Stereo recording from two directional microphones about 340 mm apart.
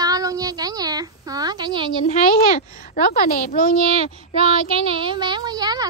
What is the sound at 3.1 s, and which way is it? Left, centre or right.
Speech, left.